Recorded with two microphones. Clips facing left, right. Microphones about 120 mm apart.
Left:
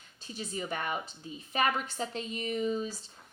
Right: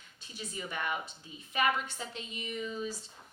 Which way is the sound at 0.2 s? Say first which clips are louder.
Left 4 dB; 35° left (ahead or behind).